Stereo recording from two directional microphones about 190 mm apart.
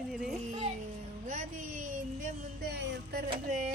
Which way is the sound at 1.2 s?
40° right (ahead or behind).